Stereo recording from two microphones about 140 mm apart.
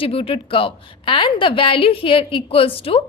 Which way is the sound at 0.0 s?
40° left (ahead or behind).